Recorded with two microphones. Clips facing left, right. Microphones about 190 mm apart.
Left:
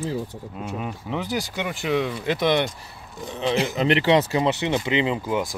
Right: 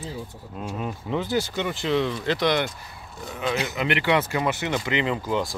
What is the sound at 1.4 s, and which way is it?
Speech, 10° left (ahead or behind).